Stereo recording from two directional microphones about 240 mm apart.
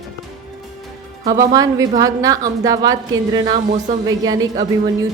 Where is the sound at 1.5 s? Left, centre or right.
Centre.